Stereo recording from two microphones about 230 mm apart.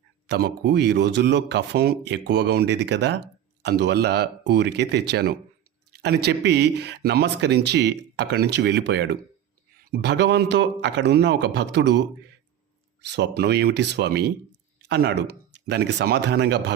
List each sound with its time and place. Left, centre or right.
0.3 s speech: right
13.1 s speech: right